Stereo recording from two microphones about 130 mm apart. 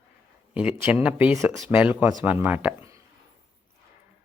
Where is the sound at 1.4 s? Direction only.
20° right (ahead or behind).